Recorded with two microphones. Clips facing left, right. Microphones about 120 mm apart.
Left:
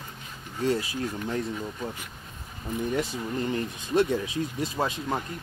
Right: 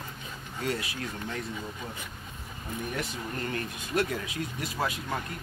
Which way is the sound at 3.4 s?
20° left (ahead or behind).